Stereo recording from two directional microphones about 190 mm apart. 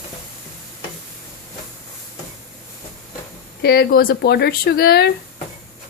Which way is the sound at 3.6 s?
55° left (ahead or behind).